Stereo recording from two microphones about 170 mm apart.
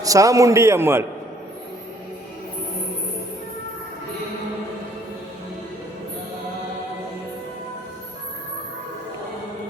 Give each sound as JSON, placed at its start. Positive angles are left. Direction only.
{"t": 0.0, "sound": "a man's voice", "side_deg": -20}